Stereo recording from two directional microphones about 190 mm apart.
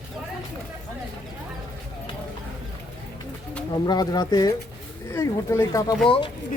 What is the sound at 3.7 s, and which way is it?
Speech, 20° left (ahead or behind).